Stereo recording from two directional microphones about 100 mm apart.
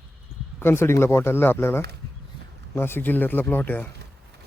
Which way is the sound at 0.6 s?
25° left (ahead or behind).